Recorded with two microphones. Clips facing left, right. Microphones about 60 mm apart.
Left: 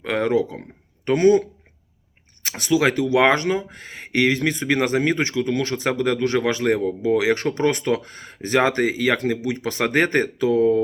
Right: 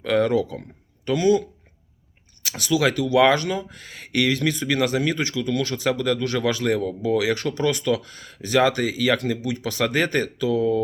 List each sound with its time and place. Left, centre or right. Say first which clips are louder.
0.0 s speech: even; left
1.0 s speech: left 3 dB; left